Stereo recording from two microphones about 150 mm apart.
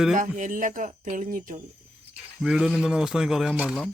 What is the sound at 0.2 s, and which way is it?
Speech, 60° right (ahead or behind).